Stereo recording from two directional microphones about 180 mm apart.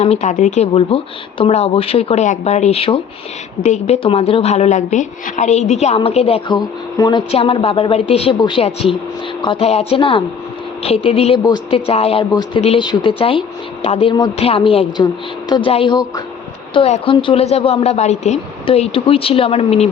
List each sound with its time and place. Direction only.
0.0 s a woman's voice: 40° left (ahead or behind)